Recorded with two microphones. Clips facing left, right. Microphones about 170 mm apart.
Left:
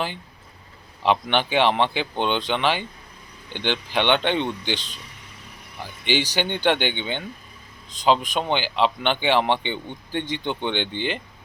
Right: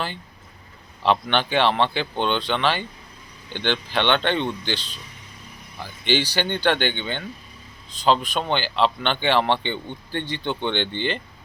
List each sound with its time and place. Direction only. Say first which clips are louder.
1.0 s speech: even; 15° left (ahead or behind)
6.1 s speech: right 1 dB; 15° left (ahead or behind)